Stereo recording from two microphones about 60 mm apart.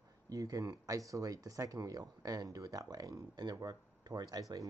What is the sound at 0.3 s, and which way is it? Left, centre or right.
Speech, right.